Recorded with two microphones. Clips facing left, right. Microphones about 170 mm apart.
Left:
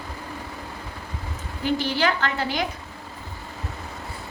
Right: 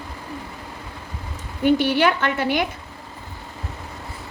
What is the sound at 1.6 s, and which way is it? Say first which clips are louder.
A woman's voice: right 6 dB; 60° right (ahead or behind).